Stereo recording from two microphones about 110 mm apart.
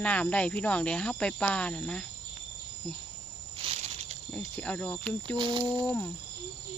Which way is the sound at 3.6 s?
85° right.